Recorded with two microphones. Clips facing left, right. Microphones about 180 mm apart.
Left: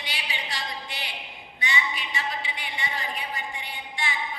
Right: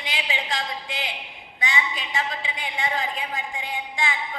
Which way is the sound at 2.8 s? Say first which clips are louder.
Right 8 dB; 90° right.